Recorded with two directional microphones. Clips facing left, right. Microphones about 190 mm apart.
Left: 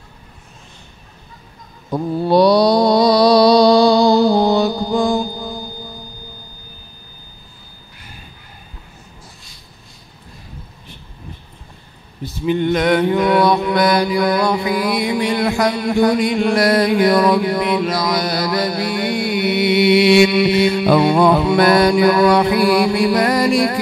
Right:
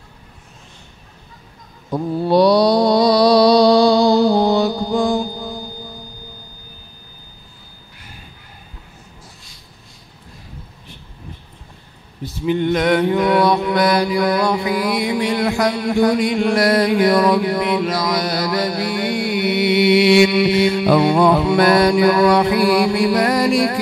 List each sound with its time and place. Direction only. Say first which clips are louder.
2.2 s mantra: left 1 dB; 20° left (ahead or behind)
12.7 s mantra: left 1 dB; 20° left (ahead or behind)
21.5 s music: left 1 dB; 15° left (ahead or behind)